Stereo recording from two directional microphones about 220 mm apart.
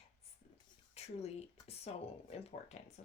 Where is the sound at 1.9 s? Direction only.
30° left (ahead or behind).